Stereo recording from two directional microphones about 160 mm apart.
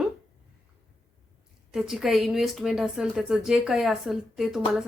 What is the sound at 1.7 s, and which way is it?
Speech, 5° right (ahead or behind).